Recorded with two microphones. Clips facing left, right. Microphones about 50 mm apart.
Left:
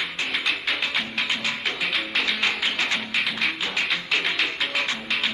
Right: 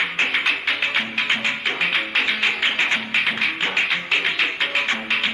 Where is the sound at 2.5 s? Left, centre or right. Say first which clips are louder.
Right 4 dB; right.